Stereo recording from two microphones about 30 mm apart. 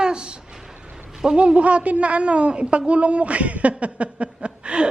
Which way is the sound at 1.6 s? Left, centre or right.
Right.